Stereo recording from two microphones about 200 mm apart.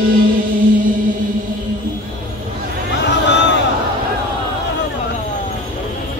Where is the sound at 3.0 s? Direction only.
60° left (ahead or behind).